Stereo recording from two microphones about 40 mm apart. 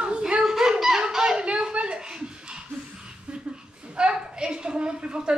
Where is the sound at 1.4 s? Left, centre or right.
Right.